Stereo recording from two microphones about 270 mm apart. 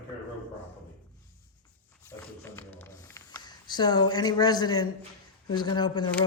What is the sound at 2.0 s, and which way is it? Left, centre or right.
Speech, centre.